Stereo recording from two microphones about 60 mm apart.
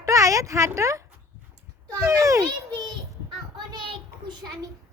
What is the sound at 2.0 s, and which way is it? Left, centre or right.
Speech, right.